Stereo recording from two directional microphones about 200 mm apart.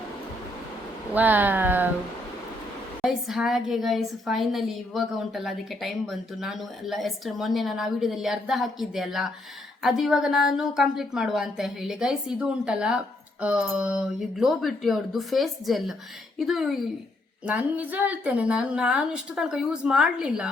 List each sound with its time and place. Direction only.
1.1 s speech: 10° right (ahead or behind)
3.0 s a woman's voice: centre (ahead or behind)